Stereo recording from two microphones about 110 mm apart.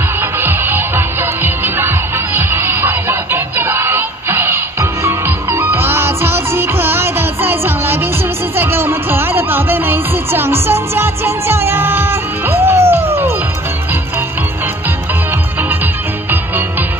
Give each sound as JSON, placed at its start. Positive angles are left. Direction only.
{"t": 0.4, "sound": "music", "side_deg": -20}